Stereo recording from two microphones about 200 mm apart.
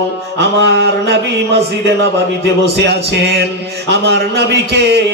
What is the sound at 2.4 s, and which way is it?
Music, 55° right (ahead or behind).